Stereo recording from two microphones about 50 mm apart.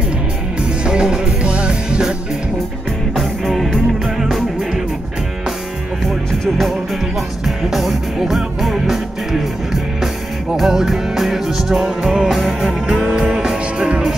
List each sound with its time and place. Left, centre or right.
0.8 s music: centre
3.2 s music: centre
7.4 s music: centre
10.5 s music: centre